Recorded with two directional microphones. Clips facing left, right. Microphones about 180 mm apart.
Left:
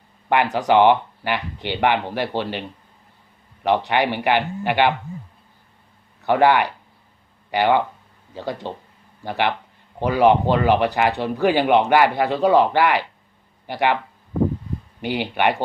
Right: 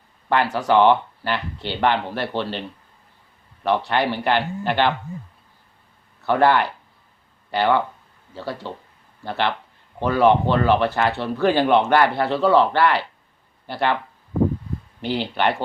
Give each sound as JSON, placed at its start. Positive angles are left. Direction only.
{"t": 0.3, "sound": "speech", "side_deg": 15}
{"t": 6.2, "sound": "speech", "side_deg": 15}
{"t": 15.0, "sound": "speech", "side_deg": 15}